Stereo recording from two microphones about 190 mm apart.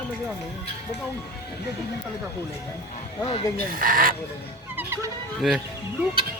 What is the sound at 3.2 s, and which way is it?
Speech, 30° left (ahead or behind).